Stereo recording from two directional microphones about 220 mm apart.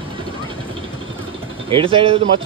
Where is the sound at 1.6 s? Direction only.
25° right (ahead or behind).